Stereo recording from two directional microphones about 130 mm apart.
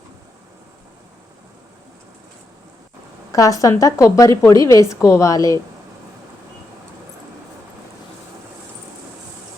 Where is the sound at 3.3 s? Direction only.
25° left (ahead or behind).